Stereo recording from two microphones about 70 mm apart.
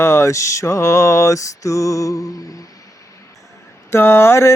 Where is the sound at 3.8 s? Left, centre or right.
Left.